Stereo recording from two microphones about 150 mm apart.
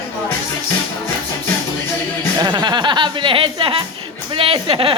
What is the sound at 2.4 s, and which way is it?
A woman's voice, 25° right (ahead or behind).